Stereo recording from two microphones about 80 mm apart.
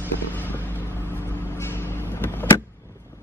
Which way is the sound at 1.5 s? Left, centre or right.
Left.